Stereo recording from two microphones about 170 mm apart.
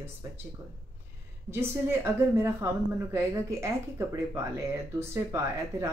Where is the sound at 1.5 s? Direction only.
15° right (ahead or behind).